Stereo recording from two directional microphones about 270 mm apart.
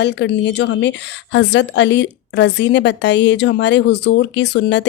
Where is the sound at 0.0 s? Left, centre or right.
Left.